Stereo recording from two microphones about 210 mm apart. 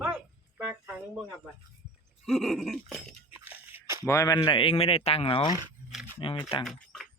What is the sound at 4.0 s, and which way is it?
Speech, 15° left (ahead or behind).